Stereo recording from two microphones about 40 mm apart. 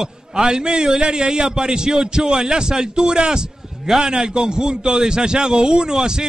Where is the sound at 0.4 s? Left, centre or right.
Centre.